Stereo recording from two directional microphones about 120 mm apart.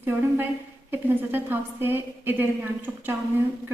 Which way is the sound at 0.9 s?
15° right (ahead or behind).